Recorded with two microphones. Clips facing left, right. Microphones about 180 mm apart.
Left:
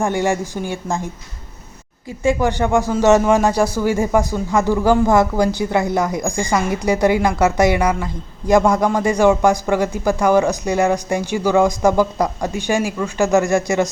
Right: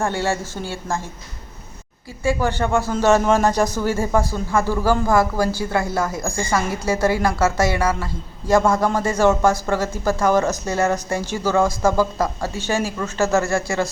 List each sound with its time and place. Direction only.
0.0 s a man's voice: 15° left (ahead or behind)
2.2 s a man's voice: 15° left (ahead or behind)